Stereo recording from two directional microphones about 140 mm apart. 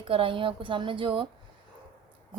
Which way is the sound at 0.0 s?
40° right (ahead or behind).